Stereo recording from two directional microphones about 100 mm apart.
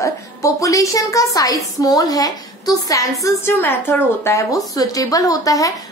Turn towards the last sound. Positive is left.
turn(degrees=35)  # may be behind; listen again after turning